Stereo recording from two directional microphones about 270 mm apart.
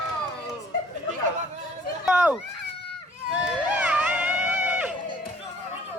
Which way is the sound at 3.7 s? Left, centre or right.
Centre.